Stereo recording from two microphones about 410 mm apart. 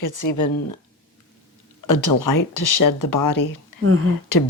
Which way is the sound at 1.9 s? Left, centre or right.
Left.